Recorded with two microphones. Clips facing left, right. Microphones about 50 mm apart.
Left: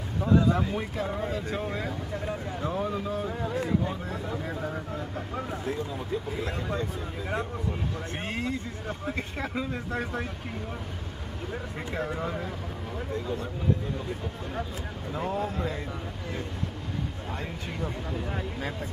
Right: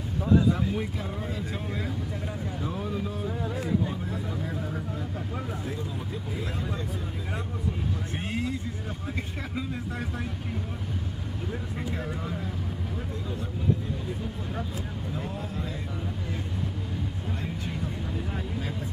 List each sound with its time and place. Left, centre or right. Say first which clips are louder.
0.5 s speech: even; centre
4.1 s speech: even; left
6.7 s speech: left 2 dB; left
9.6 s speech: left 1 dB; left
12.0 s speech: left 3 dB; left
15.1 s speech: left 7 dB; left